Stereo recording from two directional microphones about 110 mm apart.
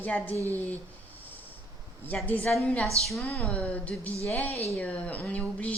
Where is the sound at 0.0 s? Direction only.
15° left (ahead or behind).